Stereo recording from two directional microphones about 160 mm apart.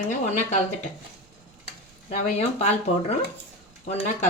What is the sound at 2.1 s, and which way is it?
Speech, 45° left (ahead or behind).